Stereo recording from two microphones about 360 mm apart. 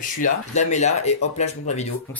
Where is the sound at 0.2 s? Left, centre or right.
Centre.